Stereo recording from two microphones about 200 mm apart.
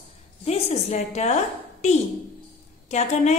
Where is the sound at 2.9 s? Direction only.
35° left (ahead or behind).